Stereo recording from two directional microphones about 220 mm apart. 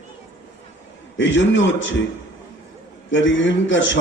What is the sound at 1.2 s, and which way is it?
Speech, 55° left (ahead or behind).